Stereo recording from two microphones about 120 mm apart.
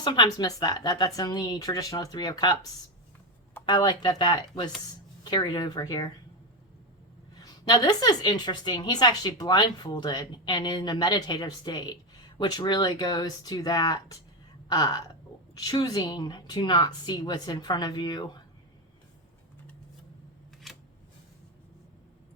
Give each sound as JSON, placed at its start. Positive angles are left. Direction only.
{"t": 0.0, "sound": "a woman's voice", "side_deg": 35}
{"t": 3.7, "sound": "a woman's voice", "side_deg": 40}
{"t": 7.4, "sound": "a woman's voice", "side_deg": 35}
{"t": 20.7, "sound": "a sound", "side_deg": 0}